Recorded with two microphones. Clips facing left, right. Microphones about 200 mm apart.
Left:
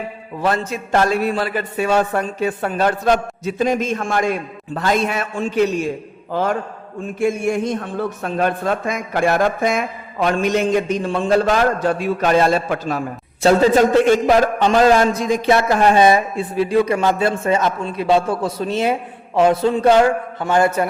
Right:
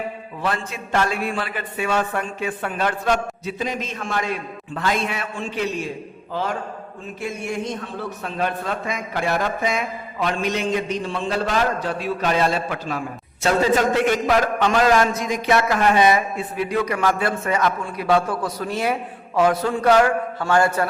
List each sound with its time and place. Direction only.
0.4 s a man's voice: 40° left (ahead or behind)
7.2 s a man's voice: 50° left (ahead or behind)
13.4 s a man's voice: 30° left (ahead or behind)